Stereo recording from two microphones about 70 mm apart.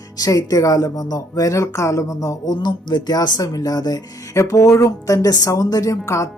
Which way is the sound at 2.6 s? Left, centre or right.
Left.